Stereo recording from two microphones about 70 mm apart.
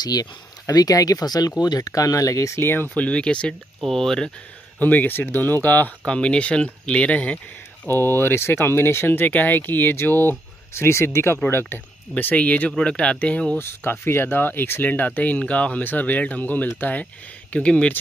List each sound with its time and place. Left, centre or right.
0.0 s speech: left
2.6 s speech: left
2.9 s speech: centre
4.7 s speech: left
7.9 s speech: left
10.7 s speech: left
12.2 s speech: left
13.6 s speech: left; by 17.9 s centre